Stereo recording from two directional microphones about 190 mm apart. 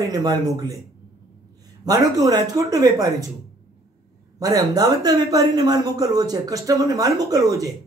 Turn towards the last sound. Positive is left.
turn(degrees=-15)  # may be behind; listen again after turning